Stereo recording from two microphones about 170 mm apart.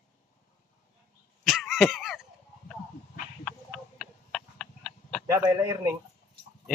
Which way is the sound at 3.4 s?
5° left (ahead or behind).